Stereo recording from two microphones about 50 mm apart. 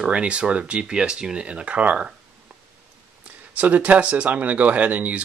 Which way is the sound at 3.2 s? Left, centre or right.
Right.